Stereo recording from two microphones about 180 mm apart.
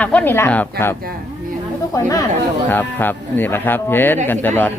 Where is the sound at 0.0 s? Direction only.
10° left (ahead or behind).